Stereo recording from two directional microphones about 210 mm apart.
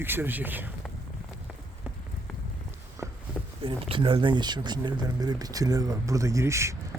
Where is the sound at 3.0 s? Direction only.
15° right (ahead or behind).